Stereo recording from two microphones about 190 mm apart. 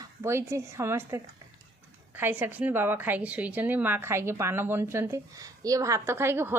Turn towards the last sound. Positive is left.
turn(degrees=-15)  # may be behind; listen again after turning